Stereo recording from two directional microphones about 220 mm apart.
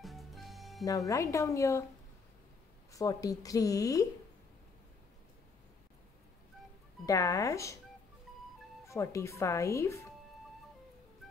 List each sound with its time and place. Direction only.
0.0 s music: centre (ahead or behind)
0.8 s a woman's voice: 15° left (ahead or behind)
2.9 s a woman's voice: 15° left (ahead or behind)
7.1 s a woman's voice: 15° left (ahead or behind)
8.8 s a woman's voice: 15° left (ahead or behind)